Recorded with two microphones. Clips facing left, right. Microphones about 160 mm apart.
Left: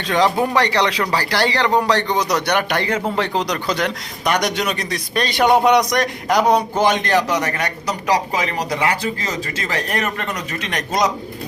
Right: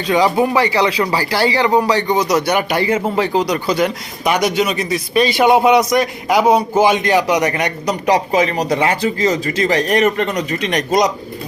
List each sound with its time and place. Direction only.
0.1 s a man's voice: 5° right (ahead or behind)